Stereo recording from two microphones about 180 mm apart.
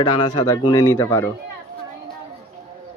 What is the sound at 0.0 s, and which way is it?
Speech, 20° left (ahead or behind).